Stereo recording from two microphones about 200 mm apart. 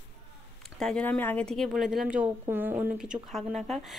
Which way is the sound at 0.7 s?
5° left (ahead or behind).